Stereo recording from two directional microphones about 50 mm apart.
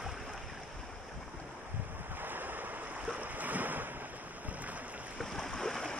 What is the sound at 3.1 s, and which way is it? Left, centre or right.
Ocean, right.